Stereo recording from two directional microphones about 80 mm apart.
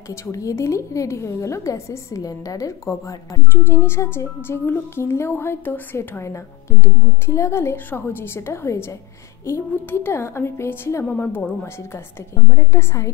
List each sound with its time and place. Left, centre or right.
0.1 s speech: left
12.4 s speech: left